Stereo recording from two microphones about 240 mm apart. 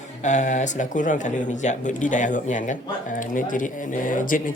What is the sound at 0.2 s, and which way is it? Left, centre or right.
Speech, left.